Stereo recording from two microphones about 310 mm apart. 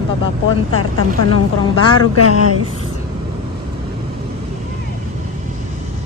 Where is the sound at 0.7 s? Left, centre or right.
Left.